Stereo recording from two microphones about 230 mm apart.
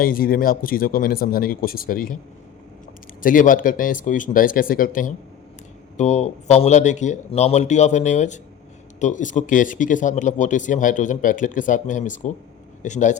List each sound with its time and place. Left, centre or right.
0.0 s speech: left
3.2 s speech: left